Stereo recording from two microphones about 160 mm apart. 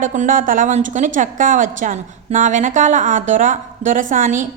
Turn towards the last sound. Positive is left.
turn(degrees=-50)  # may be behind; listen again after turning